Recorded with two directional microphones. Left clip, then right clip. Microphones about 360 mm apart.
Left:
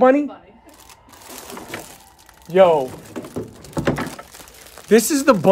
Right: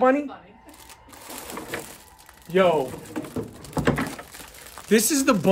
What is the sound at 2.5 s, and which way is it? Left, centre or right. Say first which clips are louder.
Speech: left 7 dB; centre.